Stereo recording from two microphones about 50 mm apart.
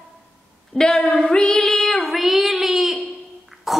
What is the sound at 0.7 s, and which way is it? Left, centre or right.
Child singing, centre.